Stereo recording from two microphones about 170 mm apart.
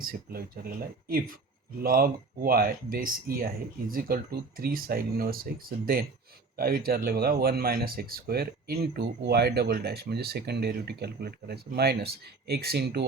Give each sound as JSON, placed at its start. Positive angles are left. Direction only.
{"t": 0.0, "sound": "speech", "side_deg": -60}